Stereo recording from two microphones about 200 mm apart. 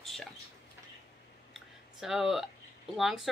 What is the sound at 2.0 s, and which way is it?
A woman's voice, centre (ahead or behind).